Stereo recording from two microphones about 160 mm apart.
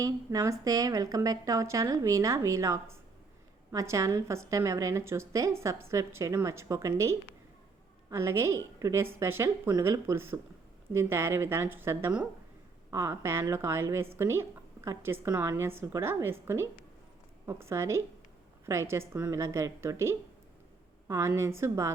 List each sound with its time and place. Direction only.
0.0 s a woman's voice: 20° right (ahead or behind)